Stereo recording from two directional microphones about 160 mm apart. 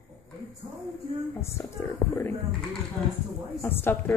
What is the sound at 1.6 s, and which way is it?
Speech, 15° left (ahead or behind).